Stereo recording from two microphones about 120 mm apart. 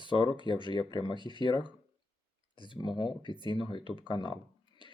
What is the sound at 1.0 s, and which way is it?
Speech, 40° right (ahead or behind).